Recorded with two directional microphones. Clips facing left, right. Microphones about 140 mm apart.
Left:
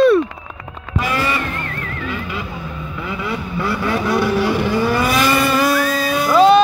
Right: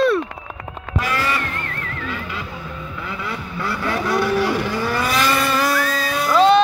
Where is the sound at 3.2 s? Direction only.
15° left (ahead or behind).